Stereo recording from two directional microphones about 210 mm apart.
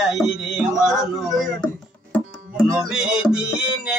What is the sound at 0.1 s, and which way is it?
Speech, centre (ahead or behind).